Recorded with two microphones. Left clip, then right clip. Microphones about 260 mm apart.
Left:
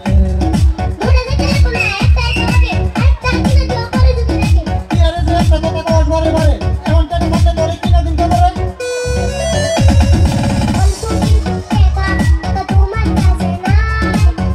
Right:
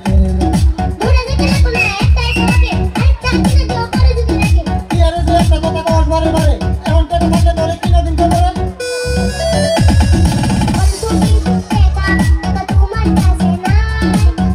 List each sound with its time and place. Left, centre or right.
1.4 s music: right